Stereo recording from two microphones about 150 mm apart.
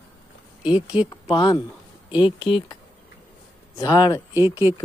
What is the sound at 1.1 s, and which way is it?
Speech, 30° left (ahead or behind).